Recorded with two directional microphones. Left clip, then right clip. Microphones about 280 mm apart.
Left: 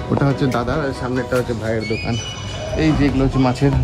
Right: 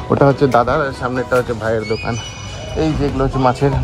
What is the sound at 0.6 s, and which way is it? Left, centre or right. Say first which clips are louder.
Speech: right 6 dB; centre.